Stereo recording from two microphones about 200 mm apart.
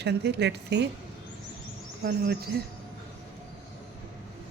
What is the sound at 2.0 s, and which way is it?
Speech, 50° right (ahead or behind).